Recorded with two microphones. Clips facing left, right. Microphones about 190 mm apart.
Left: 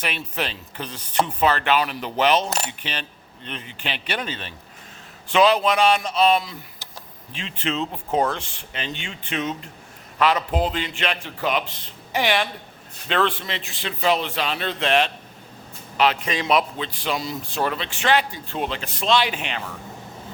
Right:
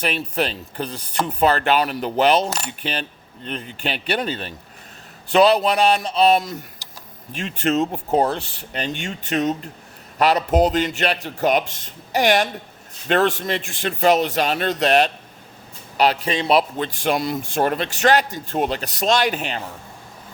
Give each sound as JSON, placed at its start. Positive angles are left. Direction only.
{"t": 0.0, "sound": "speech", "side_deg": -35}
{"t": 16.7, "sound": "speech", "side_deg": -50}